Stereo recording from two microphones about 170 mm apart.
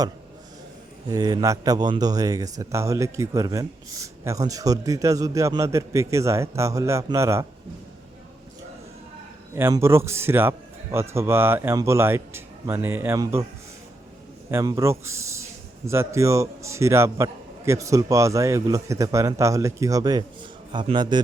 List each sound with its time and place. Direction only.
1.0 s a man's voice: 25° right (ahead or behind)
9.6 s a man's voice: 15° right (ahead or behind)
14.5 s a man's voice: 20° right (ahead or behind)